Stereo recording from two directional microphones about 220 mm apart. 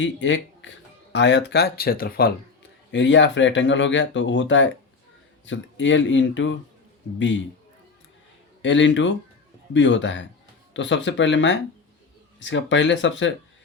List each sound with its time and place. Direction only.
0.0 s speech: 55° left (ahead or behind)
2.9 s speech: 55° left (ahead or behind)
8.6 s speech: 55° left (ahead or behind)